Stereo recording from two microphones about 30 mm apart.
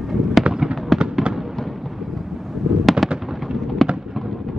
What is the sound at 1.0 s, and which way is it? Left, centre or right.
Fireworks, right.